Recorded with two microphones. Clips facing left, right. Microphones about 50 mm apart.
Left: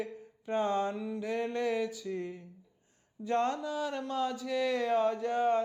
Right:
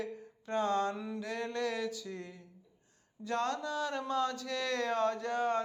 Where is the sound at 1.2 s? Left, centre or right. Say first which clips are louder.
Left 4 dB; centre.